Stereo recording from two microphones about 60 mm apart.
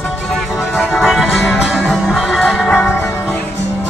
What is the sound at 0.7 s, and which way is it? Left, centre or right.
Music, centre.